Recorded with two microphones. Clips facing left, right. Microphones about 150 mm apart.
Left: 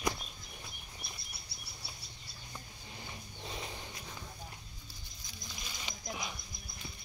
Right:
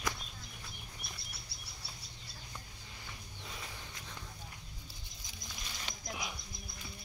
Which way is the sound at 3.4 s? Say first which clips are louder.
Left 5 dB; 25° left (ahead or behind).